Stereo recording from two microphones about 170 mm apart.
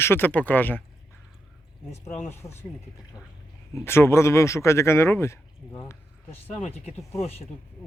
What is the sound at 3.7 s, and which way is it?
Speech, 15° left (ahead or behind).